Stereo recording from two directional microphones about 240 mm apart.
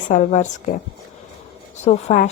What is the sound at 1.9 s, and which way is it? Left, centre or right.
Speech, left.